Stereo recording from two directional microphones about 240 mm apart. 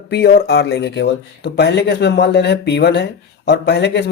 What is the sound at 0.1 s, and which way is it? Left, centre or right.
Speech, left.